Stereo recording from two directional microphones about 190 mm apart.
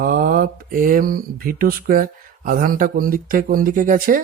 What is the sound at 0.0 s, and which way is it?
Speech, 45° right (ahead or behind).